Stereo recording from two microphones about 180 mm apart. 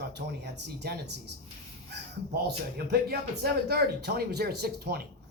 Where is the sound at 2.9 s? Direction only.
60° right (ahead or behind).